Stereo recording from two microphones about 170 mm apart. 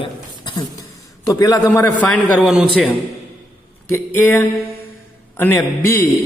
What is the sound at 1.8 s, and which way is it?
Speech, 10° left (ahead or behind).